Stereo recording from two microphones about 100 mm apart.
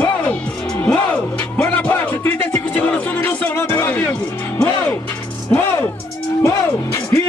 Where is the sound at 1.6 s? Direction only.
20° left (ahead or behind).